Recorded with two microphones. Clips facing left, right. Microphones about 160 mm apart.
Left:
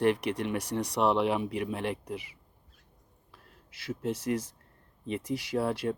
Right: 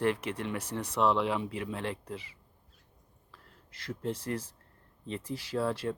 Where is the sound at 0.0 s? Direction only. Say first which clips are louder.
Left 4 dB; 15° left (ahead or behind).